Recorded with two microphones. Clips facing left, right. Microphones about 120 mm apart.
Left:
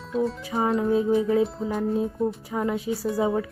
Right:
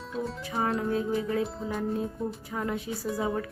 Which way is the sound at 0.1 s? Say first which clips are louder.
Left 8 dB; centre (ahead or behind).